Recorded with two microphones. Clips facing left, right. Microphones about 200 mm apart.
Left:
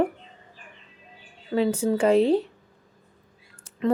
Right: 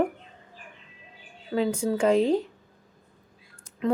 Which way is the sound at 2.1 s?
35° left (ahead or behind).